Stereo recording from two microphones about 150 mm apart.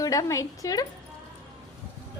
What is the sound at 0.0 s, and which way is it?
Speech, 25° left (ahead or behind).